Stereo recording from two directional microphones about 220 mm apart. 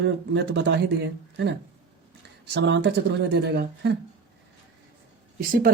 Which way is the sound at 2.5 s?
50° right (ahead or behind).